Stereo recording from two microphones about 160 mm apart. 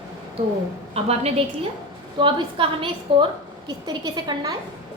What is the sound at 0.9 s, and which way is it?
A woman's voice, 40° right (ahead or behind).